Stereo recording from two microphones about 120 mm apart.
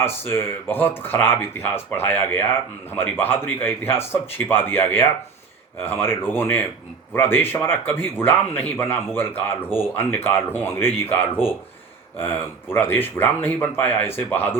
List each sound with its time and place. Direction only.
0.3 s speech: 20° left (ahead or behind)